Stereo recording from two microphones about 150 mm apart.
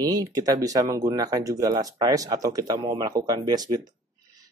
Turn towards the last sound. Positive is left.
turn(degrees=-25)  # may be behind; listen again after turning